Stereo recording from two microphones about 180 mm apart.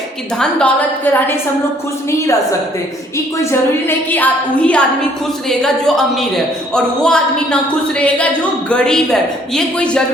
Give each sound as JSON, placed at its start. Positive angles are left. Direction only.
{"t": 0.3, "sound": "a woman's voice", "side_deg": 10}
{"t": 3.8, "sound": "a woman's voice", "side_deg": 10}